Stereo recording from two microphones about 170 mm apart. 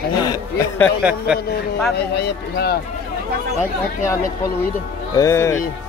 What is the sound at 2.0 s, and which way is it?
Speech, 70° left (ahead or behind).